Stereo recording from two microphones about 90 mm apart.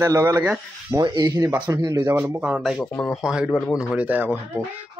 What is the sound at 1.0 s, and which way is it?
Speech, 60° right (ahead or behind).